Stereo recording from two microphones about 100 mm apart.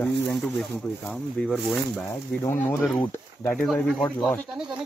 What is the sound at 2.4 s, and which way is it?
Speech, 20° left (ahead or behind).